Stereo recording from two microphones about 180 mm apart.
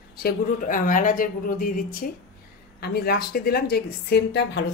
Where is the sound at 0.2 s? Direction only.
55° left (ahead or behind).